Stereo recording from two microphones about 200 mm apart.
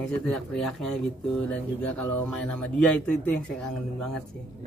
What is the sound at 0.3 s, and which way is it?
Speech, centre (ahead or behind).